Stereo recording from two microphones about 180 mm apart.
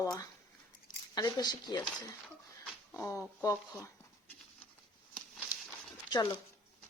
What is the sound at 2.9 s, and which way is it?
Speech, 15° left (ahead or behind).